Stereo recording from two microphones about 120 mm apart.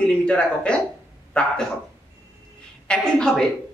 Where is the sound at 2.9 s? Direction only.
5° left (ahead or behind).